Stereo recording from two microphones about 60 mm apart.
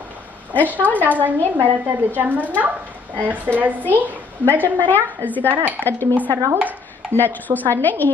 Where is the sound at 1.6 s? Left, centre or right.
Right.